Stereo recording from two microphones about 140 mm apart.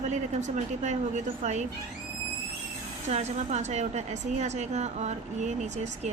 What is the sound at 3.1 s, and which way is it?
A woman's voice, 55° right (ahead or behind).